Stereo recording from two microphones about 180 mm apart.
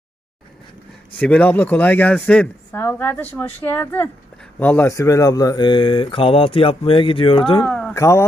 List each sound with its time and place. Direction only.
1.2 s speech: 10° left (ahead or behind); by 7.6 s 30° left (ahead or behind)
7.6 s speech: 5° left (ahead or behind)